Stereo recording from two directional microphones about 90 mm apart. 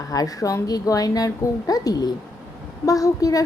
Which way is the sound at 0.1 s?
40° left (ahead or behind).